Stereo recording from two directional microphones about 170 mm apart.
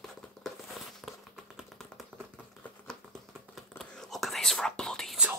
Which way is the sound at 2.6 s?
5° left (ahead or behind).